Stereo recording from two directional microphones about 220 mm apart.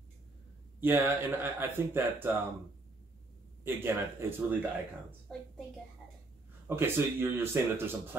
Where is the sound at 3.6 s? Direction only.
10° right (ahead or behind).